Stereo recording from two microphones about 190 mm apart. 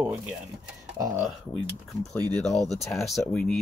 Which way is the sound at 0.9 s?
15° right (ahead or behind).